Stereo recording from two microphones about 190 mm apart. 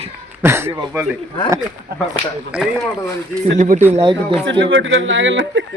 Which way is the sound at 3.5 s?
40° right (ahead or behind).